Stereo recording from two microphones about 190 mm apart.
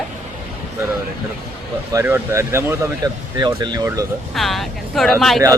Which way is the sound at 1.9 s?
15° right (ahead or behind).